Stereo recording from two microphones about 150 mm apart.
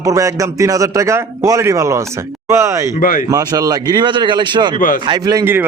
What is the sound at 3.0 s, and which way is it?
Speech, 65° left (ahead or behind).